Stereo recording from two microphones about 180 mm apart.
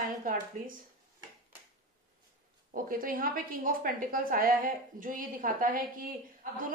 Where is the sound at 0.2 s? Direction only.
50° right (ahead or behind).